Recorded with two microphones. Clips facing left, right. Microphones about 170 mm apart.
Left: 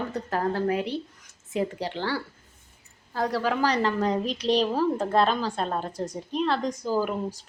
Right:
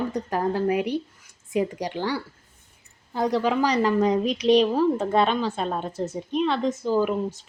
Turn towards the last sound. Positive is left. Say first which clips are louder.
# right 4 dB
turn(degrees=10)  # may be behind; listen again after turning